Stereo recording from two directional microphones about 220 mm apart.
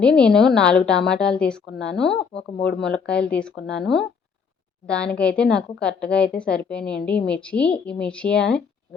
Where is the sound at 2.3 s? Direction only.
50° left (ahead or behind).